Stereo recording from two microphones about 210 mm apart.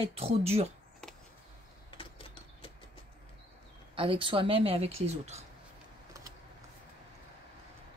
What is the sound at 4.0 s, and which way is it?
Speech, 25° right (ahead or behind).